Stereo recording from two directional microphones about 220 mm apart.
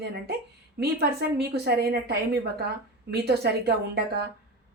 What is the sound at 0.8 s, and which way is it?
A woman's voice, 45° right (ahead or behind).